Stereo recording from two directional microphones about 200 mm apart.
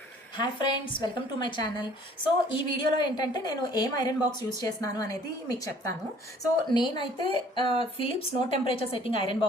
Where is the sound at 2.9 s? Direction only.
20° left (ahead or behind).